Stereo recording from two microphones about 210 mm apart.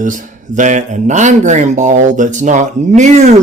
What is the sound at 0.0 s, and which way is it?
Speech, 40° right (ahead or behind).